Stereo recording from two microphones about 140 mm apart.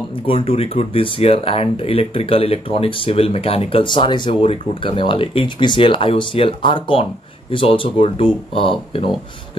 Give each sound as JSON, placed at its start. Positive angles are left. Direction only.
{"t": 0.3, "sound": "speech", "side_deg": 40}